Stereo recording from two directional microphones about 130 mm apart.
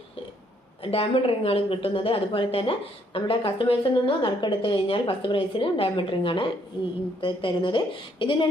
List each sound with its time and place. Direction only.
0.8 s a woman's voice: 45° left (ahead or behind)